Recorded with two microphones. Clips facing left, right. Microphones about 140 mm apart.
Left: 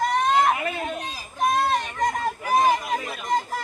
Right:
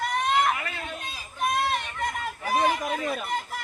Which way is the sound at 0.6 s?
25° left (ahead or behind).